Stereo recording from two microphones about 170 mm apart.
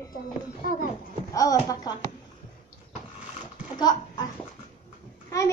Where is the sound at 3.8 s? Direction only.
25° left (ahead or behind).